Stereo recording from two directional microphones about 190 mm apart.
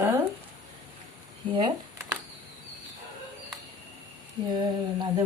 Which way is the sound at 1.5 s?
20° right (ahead or behind).